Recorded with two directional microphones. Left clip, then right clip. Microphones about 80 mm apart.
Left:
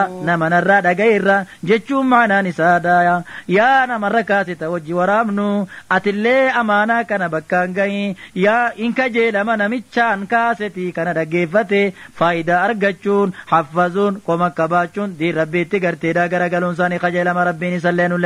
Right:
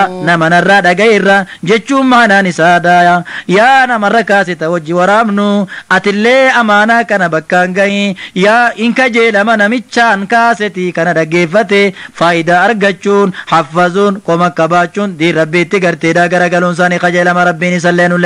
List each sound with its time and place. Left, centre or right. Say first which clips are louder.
0.2 s speech: right 8 dB; left
4.9 s speech: right 7 dB; left
16.4 s speech: right 8 dB; left